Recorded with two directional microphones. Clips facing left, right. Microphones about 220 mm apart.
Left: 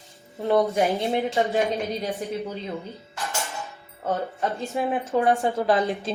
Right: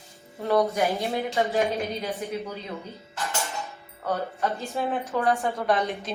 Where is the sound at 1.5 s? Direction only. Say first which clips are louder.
Left 1 dB; centre (ahead or behind).